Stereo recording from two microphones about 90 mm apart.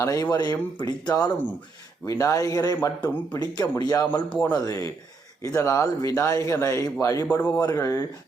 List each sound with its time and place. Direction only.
0.0 s speech: 35° left (ahead or behind)
0.3 s speech: 50° left (ahead or behind)
4.1 s speech: 15° left (ahead or behind)
4.5 s speech: 40° left (ahead or behind)